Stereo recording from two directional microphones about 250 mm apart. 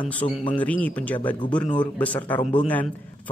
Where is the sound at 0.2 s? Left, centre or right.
Centre.